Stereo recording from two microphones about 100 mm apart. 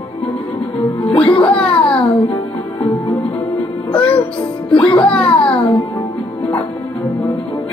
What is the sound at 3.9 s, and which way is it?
Music, 70° left (ahead or behind).